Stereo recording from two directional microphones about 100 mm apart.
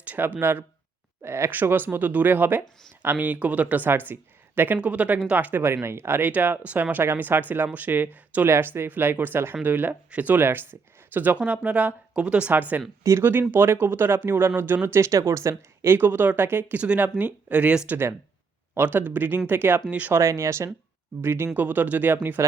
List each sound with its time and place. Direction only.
0.0 s speech: 15° right (ahead or behind)
13.0 s speech: 25° right (ahead or behind)
20.1 s speech: 30° right (ahead or behind)